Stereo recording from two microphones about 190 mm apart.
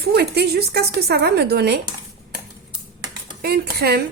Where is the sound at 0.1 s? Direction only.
55° right (ahead or behind).